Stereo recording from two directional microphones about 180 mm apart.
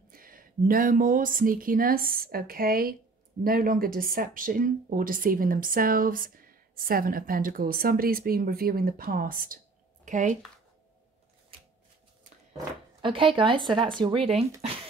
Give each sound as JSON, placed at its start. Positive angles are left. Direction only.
{"t": 0.1, "sound": "speech", "side_deg": -50}
{"t": 13.0, "sound": "speech", "side_deg": -30}